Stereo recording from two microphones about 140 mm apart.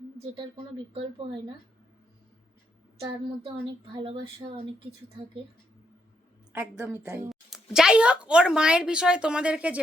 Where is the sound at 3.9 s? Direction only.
40° right (ahead or behind).